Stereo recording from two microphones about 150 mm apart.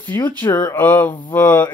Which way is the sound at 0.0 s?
10° left (ahead or behind).